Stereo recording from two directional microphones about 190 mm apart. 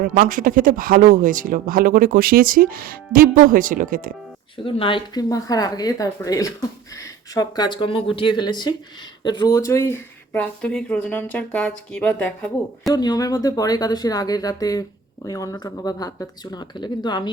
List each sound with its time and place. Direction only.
0.3 s speech: 45° right (ahead or behind)
4.5 s speech: 25° left (ahead or behind); by 12.9 s 5° left (ahead or behind)
12.9 s speech: 20° left (ahead or behind)